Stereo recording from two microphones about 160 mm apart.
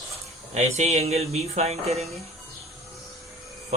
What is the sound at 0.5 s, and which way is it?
Speech, 45° right (ahead or behind).